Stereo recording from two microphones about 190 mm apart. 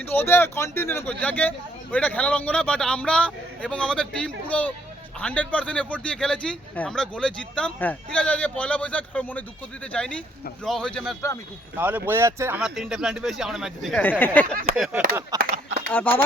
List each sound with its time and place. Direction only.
0.0 s speech: 10° left (ahead or behind)
11.8 s speech: 10° right (ahead or behind); by 14.4 s 10° left (ahead or behind)
15.3 s speech: 20° right (ahead or behind)
15.9 s speech: 10° left (ahead or behind)